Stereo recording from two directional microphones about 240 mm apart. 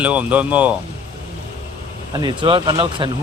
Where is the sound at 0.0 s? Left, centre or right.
Centre.